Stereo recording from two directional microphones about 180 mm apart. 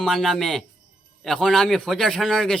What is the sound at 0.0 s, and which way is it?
A man's voice, centre (ahead or behind).